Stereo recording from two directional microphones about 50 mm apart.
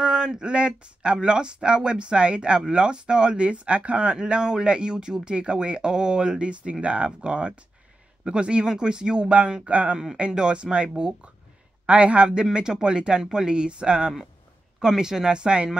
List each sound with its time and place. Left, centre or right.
0.0 s speech: centre